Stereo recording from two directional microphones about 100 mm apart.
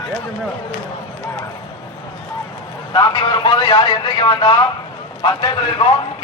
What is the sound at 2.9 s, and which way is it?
A man's voice, 45° left (ahead or behind).